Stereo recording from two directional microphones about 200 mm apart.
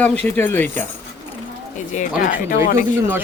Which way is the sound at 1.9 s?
40° left (ahead or behind).